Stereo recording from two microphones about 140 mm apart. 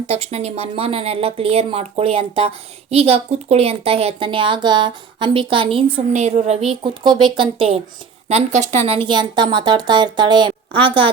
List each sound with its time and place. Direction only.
0.1 s speech: 45° right (ahead or behind)
6.1 s speech: 55° right (ahead or behind)
6.7 s speech: 35° right (ahead or behind)
8.3 s speech: 50° right (ahead or behind)